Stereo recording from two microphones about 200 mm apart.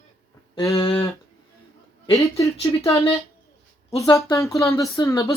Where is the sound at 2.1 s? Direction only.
15° left (ahead or behind).